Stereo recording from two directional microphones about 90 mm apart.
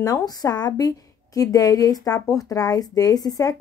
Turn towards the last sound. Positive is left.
turn(degrees=45)  # may be behind; listen again after turning